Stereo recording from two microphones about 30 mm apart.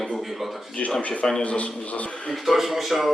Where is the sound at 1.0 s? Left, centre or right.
Left.